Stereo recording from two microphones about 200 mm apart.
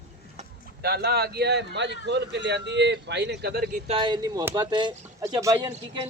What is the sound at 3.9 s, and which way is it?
Speech, 25° right (ahead or behind).